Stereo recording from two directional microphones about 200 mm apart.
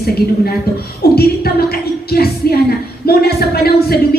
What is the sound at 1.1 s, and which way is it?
Speech, 50° left (ahead or behind).